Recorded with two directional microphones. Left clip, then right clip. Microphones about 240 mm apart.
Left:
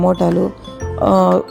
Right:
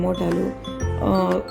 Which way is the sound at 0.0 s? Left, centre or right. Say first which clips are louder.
Left 8 dB; left.